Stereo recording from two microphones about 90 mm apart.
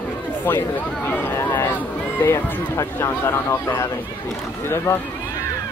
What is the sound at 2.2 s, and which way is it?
Speech, 30° left (ahead or behind).